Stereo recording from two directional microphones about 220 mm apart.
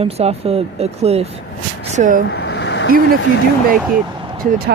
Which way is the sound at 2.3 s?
50° left (ahead or behind).